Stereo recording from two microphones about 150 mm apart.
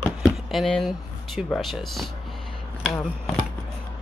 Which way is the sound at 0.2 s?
Centre (ahead or behind).